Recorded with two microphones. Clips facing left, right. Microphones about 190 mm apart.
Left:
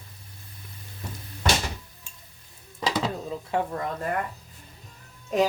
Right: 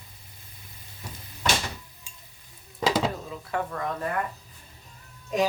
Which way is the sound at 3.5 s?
25° left (ahead or behind).